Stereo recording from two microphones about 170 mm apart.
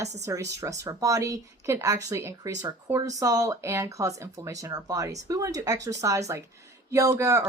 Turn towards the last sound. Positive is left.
turn(degrees=-20)  # may be behind; listen again after turning